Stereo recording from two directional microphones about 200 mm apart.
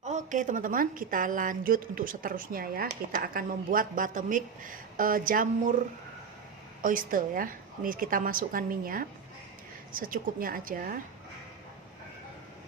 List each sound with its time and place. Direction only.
0.0 s a woman's voice: 35° right (ahead or behind)
6.8 s a woman's voice: 45° right (ahead or behind)